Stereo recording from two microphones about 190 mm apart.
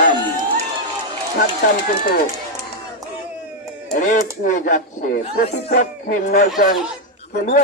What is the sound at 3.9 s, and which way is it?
Speech, 40° left (ahead or behind).